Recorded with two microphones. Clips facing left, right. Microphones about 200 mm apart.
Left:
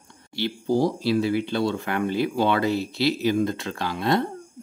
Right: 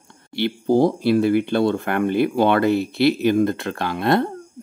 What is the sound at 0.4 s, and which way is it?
Speech, 55° right (ahead or behind).